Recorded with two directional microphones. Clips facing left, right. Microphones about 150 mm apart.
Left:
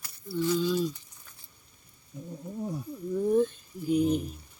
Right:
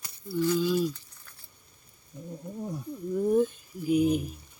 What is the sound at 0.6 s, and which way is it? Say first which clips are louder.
Speech: right 1 dB; 5° right (ahead or behind).